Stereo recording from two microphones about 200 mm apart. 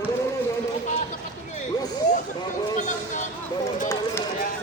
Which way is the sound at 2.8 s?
40° left (ahead or behind).